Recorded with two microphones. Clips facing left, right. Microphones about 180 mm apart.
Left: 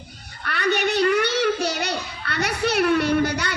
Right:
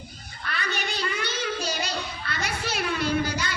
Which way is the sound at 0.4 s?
65° left (ahead or behind).